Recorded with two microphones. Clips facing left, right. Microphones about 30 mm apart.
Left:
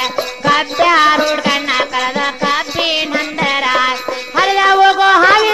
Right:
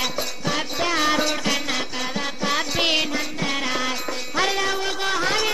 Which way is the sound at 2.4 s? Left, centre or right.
Left.